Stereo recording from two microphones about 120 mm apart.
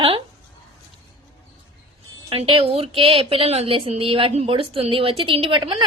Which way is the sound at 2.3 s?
50° right (ahead or behind).